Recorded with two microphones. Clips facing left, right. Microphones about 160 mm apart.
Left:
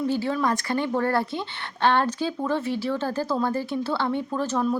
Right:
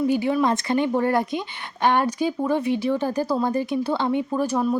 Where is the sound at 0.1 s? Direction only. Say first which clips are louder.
Right 4 dB; 15° right (ahead or behind).